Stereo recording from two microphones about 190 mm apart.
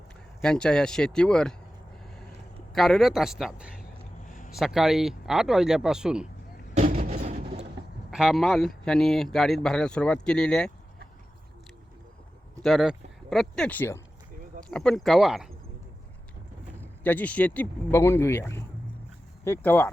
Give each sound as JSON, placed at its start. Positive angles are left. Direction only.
{"t": 0.4, "sound": "speech", "side_deg": 5}
{"t": 2.7, "sound": "speech", "side_deg": 0}
{"t": 4.3, "sound": "a sound", "side_deg": 45}
{"t": 4.5, "sound": "speech", "side_deg": 0}
{"t": 6.7, "sound": "a sound", "side_deg": -40}
{"t": 8.1, "sound": "speech", "side_deg": 0}
{"t": 12.6, "sound": "speech", "side_deg": 0}
{"t": 16.8, "sound": "speech", "side_deg": 10}